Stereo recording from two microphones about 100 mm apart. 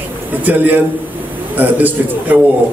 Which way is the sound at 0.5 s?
20° right (ahead or behind).